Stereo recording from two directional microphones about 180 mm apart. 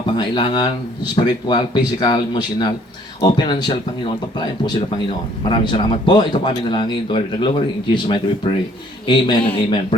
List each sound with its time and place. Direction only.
0.2 s speech: 25° left (ahead or behind)